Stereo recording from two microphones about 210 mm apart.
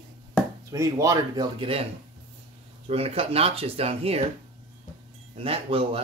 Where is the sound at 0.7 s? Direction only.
15° right (ahead or behind).